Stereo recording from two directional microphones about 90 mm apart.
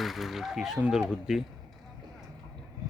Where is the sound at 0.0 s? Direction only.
Centre (ahead or behind).